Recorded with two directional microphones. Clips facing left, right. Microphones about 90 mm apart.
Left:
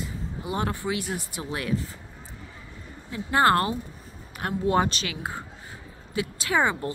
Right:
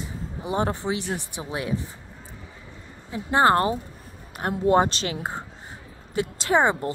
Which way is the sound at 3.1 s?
25° right (ahead or behind).